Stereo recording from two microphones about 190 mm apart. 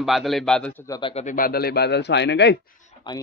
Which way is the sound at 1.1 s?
45° left (ahead or behind).